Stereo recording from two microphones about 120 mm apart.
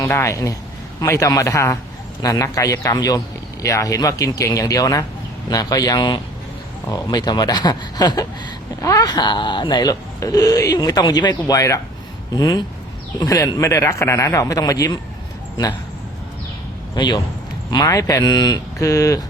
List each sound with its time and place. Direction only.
0.0 s a man's voice: 20° left (ahead or behind)
16.9 s a man's voice: 35° left (ahead or behind)